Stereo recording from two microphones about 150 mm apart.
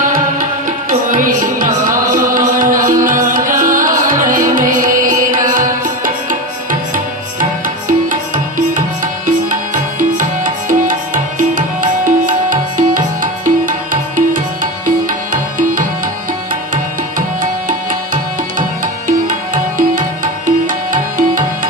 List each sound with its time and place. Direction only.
0.9 s music: 65° right (ahead or behind)
17.2 s music: 60° right (ahead or behind)